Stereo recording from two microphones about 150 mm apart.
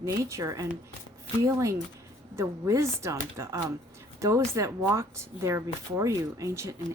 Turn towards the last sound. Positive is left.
turn(degrees=-20)  # may be behind; listen again after turning